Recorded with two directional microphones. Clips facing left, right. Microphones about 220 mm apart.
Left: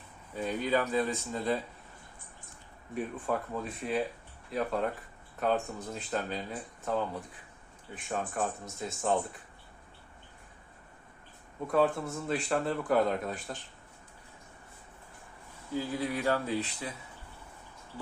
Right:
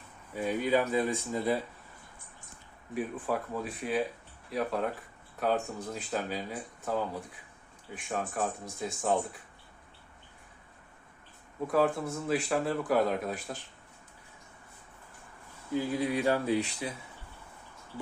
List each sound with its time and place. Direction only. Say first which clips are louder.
0.3 s speech: right 2 dB; 10° right (ahead or behind)
2.9 s speech: right 1 dB; 5° right (ahead or behind)
11.7 s speech: even; centre (ahead or behind)
15.7 s speech: right 3 dB; 20° right (ahead or behind)